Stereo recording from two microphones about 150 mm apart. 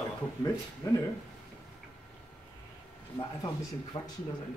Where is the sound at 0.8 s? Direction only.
20° left (ahead or behind).